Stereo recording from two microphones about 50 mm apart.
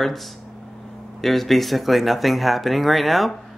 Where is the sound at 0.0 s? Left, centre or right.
Centre.